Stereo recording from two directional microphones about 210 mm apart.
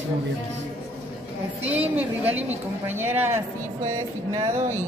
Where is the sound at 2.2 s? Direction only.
30° right (ahead or behind).